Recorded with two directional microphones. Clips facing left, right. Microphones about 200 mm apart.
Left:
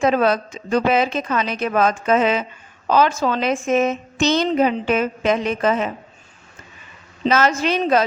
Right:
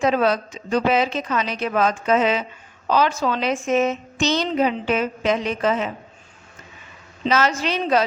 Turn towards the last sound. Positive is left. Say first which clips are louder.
# left 3 dB
turn(degrees=50)  # may be behind; listen again after turning